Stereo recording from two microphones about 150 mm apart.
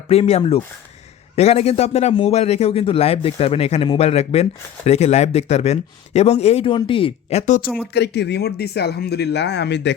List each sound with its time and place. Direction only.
0.1 s a man's voice: 45° left (ahead or behind)
7.9 s speech: 90° left